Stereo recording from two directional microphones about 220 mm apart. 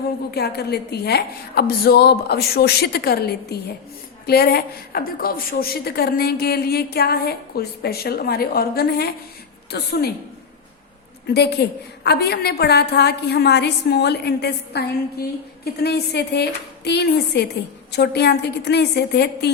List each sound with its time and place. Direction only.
0.3 s a woman's voice: 45° left (ahead or behind)
11.3 s a woman's voice: 50° left (ahead or behind)